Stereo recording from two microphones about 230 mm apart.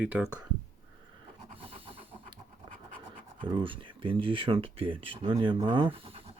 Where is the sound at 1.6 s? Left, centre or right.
Right.